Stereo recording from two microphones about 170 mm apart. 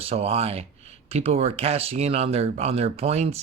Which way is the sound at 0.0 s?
35° right (ahead or behind).